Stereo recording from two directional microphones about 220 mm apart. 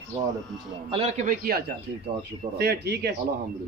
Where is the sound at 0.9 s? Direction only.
30° right (ahead or behind); by 3.1 s 50° right (ahead or behind).